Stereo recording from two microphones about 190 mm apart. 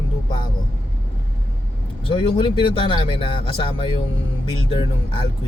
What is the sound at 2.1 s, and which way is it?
Speech, 30° left (ahead or behind).